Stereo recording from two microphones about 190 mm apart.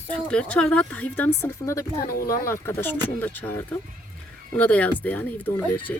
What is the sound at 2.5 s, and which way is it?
Speech, 10° left (ahead or behind).